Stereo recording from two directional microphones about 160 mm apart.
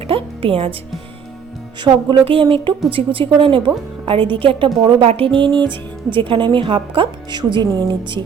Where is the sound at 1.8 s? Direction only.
30° right (ahead or behind).